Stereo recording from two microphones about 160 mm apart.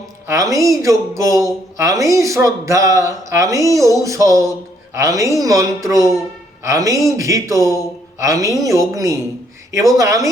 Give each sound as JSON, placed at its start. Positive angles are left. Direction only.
{"t": 0.3, "sound": "speech", "side_deg": -20}
{"t": 9.7, "sound": "speech", "side_deg": -20}